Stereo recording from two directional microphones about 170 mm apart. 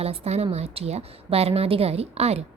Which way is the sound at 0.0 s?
35° right (ahead or behind).